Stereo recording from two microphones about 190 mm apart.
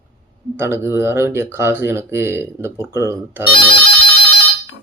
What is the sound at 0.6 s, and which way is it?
Speech, 15° right (ahead or behind).